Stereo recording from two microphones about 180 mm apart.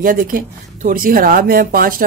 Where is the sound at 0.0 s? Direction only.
50° right (ahead or behind).